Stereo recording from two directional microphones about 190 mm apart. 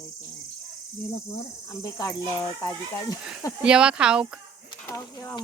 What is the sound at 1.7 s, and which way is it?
Speech, 15° left (ahead or behind).